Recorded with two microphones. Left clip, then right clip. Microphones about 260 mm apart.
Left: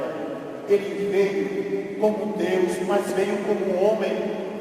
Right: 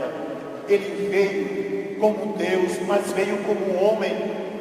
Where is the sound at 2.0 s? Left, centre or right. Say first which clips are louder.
Right 2 dB; right.